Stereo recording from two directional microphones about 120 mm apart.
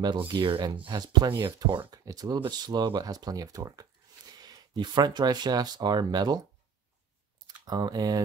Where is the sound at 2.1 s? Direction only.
30° right (ahead or behind).